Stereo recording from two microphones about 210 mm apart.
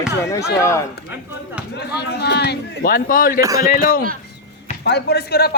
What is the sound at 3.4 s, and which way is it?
Speech, 15° right (ahead or behind).